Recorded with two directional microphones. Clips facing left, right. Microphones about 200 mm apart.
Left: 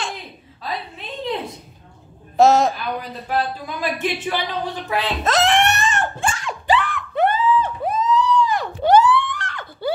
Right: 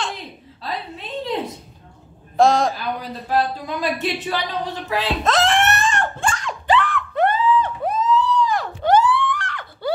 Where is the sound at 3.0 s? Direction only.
35° right (ahead or behind).